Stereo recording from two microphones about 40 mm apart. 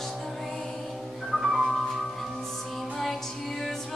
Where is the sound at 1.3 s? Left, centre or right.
Left.